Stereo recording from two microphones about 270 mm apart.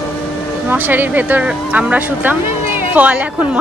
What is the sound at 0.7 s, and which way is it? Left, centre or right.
Speech, centre.